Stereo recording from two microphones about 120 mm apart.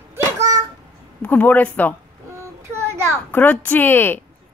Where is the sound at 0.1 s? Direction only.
25° right (ahead or behind).